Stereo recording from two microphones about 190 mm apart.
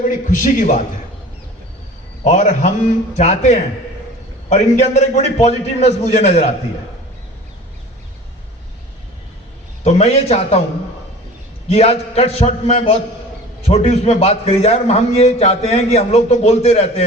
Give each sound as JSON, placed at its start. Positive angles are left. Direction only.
{"t": 0.3, "sound": "a man's voice", "side_deg": 45}
{"t": 2.2, "sound": "a man's voice", "side_deg": 40}
{"t": 9.8, "sound": "a man's voice", "side_deg": 35}
{"t": 11.7, "sound": "a man's voice", "side_deg": 35}